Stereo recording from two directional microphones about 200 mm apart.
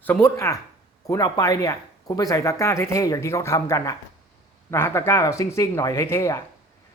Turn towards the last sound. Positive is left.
turn(degrees=15)  # may be behind; listen again after turning